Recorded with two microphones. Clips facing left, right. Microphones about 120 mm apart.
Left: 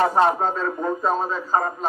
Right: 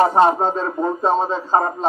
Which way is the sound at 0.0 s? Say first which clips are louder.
Right 4 dB; 30° right (ahead or behind).